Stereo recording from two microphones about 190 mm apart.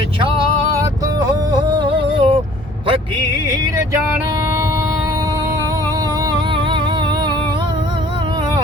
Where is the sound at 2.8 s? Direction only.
25° right (ahead or behind).